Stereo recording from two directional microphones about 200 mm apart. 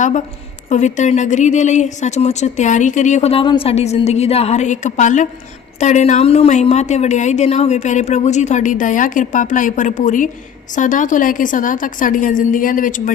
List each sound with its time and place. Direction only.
0.7 s speech: 35° left (ahead or behind)